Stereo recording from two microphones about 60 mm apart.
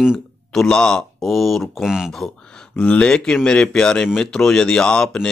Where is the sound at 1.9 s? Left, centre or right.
Centre.